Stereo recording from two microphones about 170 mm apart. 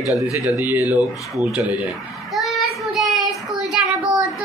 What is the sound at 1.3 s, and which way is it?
Child singing, centre (ahead or behind).